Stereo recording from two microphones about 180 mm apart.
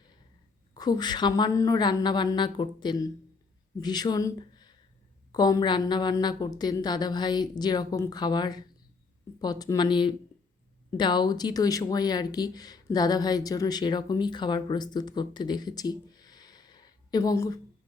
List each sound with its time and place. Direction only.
0.7 s speech: 20° left (ahead or behind)